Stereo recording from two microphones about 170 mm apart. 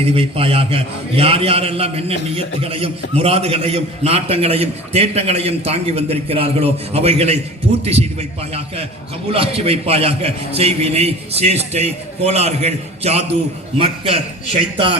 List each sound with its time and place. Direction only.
0.0 s a man's voice: 35° right (ahead or behind)
8.5 s a man's voice: 35° right (ahead or behind)